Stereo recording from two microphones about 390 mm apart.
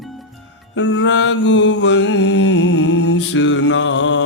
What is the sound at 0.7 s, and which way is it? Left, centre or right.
Mantra, left.